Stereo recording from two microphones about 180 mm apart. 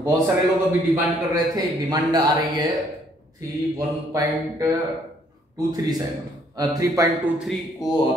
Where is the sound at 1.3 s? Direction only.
20° right (ahead or behind).